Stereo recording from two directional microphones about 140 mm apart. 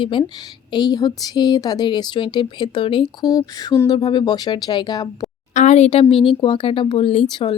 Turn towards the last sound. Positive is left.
turn(degrees=35)  # may be behind; listen again after turning